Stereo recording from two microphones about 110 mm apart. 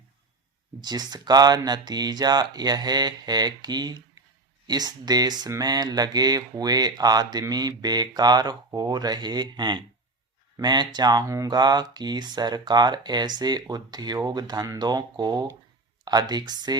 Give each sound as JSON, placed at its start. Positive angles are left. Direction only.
{"t": 0.8, "sound": "speech", "side_deg": -40}